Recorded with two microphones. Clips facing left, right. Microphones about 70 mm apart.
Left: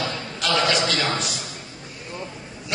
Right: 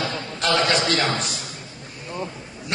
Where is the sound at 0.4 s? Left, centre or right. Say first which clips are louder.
Right 1 dB; right.